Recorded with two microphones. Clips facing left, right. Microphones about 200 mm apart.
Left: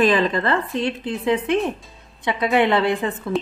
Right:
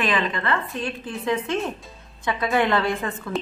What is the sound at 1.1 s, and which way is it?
A woman's voice, 15° left (ahead or behind).